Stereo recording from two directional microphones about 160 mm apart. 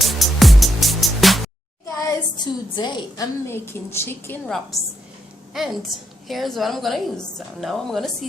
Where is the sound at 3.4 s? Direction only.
15° left (ahead or behind).